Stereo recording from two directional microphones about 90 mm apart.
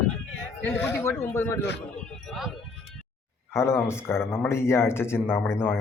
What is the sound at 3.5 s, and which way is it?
Speech, 30° left (ahead or behind).